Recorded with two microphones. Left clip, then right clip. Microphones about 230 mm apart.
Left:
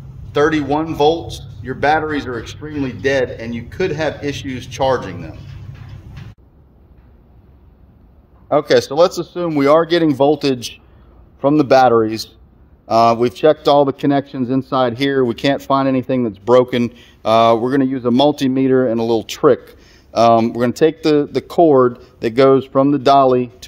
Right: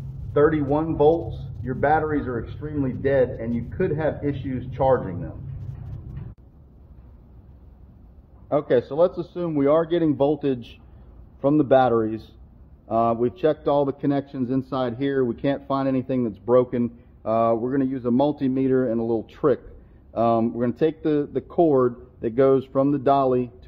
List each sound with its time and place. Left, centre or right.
0.3 s a man's voice: left
8.5 s a man's voice: left